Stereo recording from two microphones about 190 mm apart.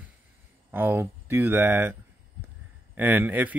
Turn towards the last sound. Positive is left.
turn(degrees=-10)  # may be behind; listen again after turning